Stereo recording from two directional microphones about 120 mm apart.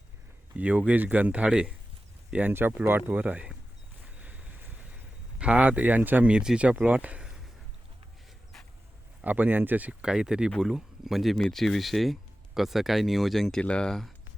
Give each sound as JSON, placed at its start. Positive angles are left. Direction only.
{"t": 0.5, "sound": "speech", "side_deg": -10}
{"t": 4.2, "sound": "vehicle", "side_deg": -10}
{"t": 5.4, "sound": "speech", "side_deg": -10}
{"t": 9.2, "sound": "speech", "side_deg": -15}